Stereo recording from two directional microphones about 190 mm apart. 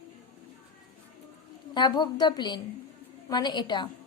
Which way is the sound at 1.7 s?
20° left (ahead or behind).